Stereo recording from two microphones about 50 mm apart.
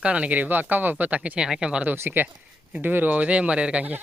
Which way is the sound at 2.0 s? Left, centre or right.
Right.